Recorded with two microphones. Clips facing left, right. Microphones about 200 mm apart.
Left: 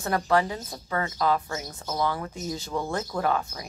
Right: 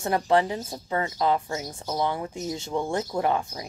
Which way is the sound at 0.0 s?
25° right (ahead or behind).